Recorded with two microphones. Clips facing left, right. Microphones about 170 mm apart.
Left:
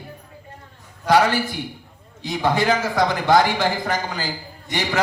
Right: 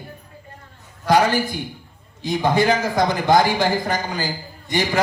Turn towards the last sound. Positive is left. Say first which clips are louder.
# right 2 dB
turn(degrees=-15)  # may be behind; listen again after turning